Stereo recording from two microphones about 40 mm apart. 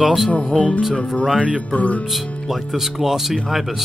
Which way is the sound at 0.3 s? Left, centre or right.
Left.